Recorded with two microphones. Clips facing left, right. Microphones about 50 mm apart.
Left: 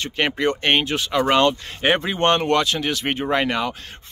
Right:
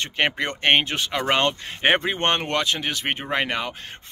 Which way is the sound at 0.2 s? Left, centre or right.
Right.